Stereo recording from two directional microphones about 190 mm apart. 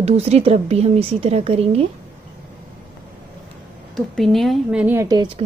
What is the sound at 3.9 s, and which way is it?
A woman's voice, centre (ahead or behind).